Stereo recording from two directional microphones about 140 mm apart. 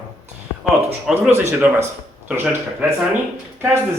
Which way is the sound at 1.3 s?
20° right (ahead or behind).